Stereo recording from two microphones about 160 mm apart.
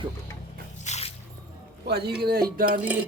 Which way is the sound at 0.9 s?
40° left (ahead or behind).